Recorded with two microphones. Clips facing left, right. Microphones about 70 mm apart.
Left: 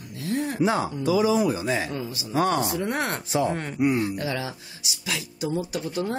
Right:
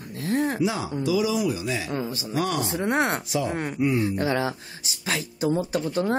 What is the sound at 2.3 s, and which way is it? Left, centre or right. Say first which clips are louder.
Speech: left 4 dB; left.